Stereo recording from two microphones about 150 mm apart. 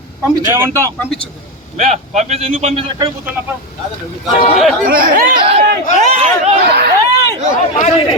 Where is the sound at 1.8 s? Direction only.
45° right (ahead or behind).